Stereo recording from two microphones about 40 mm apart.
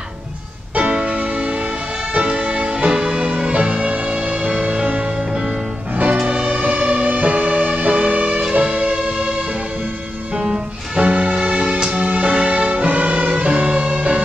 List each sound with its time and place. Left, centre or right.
0.7 s music: right
6.2 s music: right
8.6 s music: right
10.4 s music: centre